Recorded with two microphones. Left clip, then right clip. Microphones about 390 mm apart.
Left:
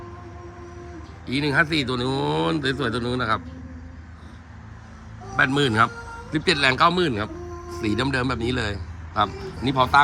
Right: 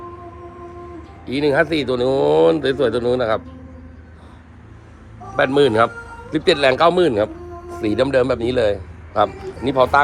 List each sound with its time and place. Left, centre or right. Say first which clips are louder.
1.2 s a man's voice: right 5 dB; centre
5.4 s a man's voice: right 5 dB; centre